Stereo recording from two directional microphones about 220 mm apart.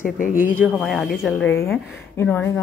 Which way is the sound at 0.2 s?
40° left (ahead or behind).